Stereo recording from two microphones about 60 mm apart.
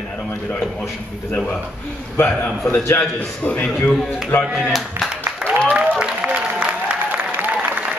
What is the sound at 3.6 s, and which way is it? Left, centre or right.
Speech, centre.